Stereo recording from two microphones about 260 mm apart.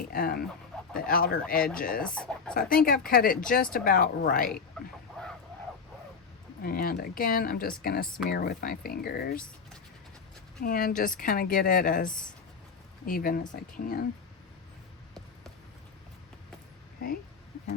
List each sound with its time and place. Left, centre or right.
0.1 s a woman's voice: left
2.0 s speech: centre
3.1 s a woman's voice: left
4.8 s a sound: centre
6.6 s a woman's voice: left
10.6 s a woman's voice: left